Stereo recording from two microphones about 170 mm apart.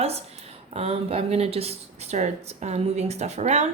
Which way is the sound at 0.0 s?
40° right (ahead or behind).